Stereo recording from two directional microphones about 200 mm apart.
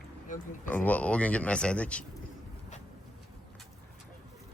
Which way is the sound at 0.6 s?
10° left (ahead or behind).